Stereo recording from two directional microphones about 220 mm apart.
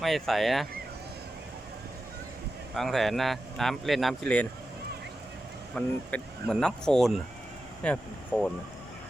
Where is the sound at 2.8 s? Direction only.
Centre (ahead or behind).